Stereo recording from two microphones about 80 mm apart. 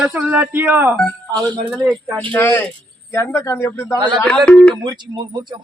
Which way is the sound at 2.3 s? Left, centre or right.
Left.